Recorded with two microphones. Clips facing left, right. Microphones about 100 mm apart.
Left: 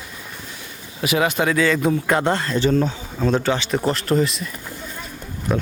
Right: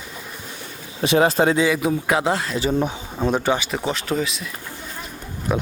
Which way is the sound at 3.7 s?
Centre (ahead or behind).